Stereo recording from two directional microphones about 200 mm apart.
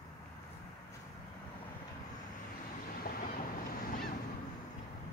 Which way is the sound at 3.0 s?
45° left (ahead or behind).